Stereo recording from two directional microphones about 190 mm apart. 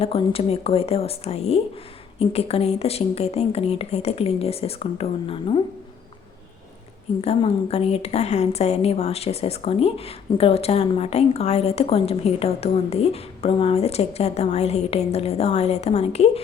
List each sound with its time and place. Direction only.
0.0 s a woman's voice: 30° left (ahead or behind)
7.2 s a woman's voice: 30° left (ahead or behind)